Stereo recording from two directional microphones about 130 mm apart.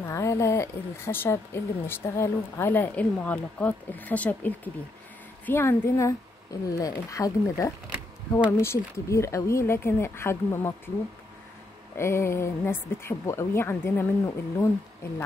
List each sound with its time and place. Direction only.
0.0 s a woman's voice: 20° left (ahead or behind)
12.0 s a woman's voice: 20° left (ahead or behind)